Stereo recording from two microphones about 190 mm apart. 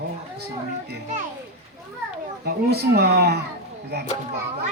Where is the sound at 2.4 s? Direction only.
55° right (ahead or behind).